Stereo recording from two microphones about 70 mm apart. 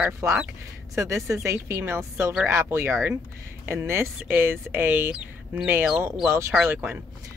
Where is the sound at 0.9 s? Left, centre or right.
Right.